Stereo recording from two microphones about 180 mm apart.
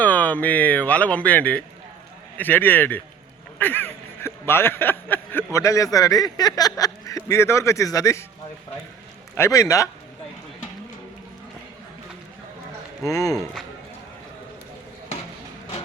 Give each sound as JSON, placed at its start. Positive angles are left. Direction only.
{"t": 0.0, "sound": "speech", "side_deg": 10}
{"t": 9.3, "sound": "speech", "side_deg": 15}
{"t": 13.1, "sound": "speech", "side_deg": 20}
{"t": 13.3, "sound": "speech", "side_deg": 0}